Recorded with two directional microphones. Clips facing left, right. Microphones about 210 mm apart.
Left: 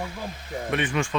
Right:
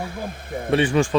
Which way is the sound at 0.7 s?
30° right (ahead or behind).